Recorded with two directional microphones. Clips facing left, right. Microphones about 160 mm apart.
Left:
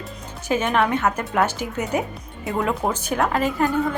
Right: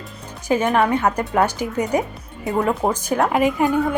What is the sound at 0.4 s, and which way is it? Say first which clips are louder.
A woman's voice: right 3 dB; 10° right (ahead or behind).